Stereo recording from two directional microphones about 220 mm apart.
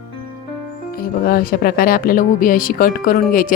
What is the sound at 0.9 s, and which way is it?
Speech, 40° left (ahead or behind).